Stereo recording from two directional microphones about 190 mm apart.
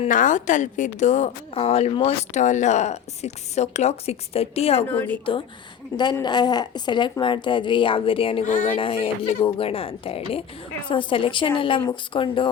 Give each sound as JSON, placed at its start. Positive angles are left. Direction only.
{"t": 0.0, "sound": "a woman's voice", "side_deg": 40}
{"t": 4.9, "sound": "a woman's voice", "side_deg": 10}
{"t": 6.0, "sound": "a woman's voice", "side_deg": 20}